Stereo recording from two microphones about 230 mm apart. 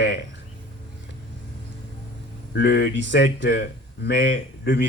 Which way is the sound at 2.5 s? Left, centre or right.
Left.